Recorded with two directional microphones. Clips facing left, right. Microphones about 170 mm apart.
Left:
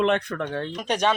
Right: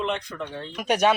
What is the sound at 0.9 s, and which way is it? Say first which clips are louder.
Speech: right 3 dB; 10° right (ahead or behind).